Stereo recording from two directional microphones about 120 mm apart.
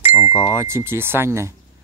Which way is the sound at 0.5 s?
20° right (ahead or behind).